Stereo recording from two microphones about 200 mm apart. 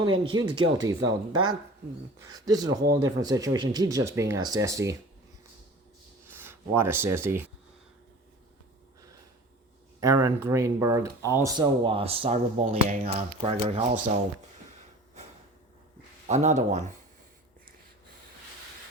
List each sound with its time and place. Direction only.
0.0 s speech: 25° right (ahead or behind)
6.2 s speech: 10° right (ahead or behind)
10.0 s speech: 15° right (ahead or behind)
16.2 s speech: 35° right (ahead or behind)